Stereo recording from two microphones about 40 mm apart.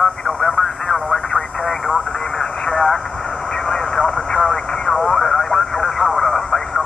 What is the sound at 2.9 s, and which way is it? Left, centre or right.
Vehicle, centre.